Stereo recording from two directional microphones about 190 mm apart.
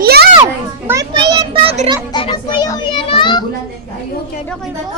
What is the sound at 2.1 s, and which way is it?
A child's voice, 25° left (ahead or behind).